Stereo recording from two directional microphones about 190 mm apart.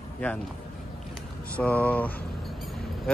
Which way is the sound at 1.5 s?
10° left (ahead or behind).